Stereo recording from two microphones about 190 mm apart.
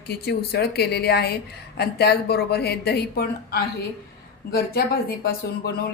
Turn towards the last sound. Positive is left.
turn(degrees=55)  # may be behind; listen again after turning